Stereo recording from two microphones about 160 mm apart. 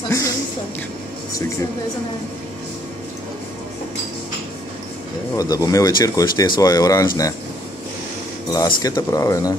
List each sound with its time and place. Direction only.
5.3 s speech: 20° left (ahead or behind)
8.5 s speech: 25° left (ahead or behind)